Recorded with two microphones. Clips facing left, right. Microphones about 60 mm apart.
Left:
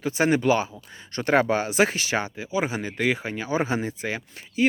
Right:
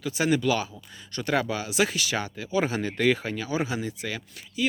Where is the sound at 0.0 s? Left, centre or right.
Left.